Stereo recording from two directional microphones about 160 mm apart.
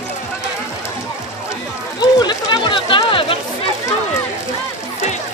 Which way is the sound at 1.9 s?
25° left (ahead or behind).